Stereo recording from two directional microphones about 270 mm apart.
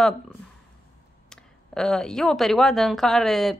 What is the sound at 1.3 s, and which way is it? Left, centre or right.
Speech, centre.